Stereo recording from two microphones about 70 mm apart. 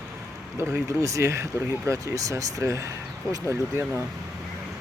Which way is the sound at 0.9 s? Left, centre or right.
Right.